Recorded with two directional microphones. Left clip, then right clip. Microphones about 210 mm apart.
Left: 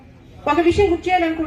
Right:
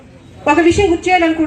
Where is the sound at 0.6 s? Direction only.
30° right (ahead or behind).